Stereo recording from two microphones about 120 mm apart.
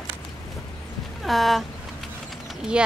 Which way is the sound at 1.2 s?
Centre (ahead or behind).